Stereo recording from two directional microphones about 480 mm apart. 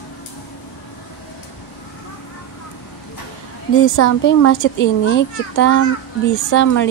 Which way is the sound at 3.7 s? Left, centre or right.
Left.